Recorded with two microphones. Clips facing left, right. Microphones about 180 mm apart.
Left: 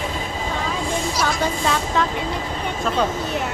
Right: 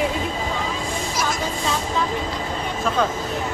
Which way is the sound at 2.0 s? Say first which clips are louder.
Left 3 dB; 80° left.